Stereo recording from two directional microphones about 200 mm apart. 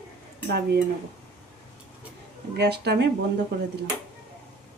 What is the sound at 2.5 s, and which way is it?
Speech, 55° right (ahead or behind).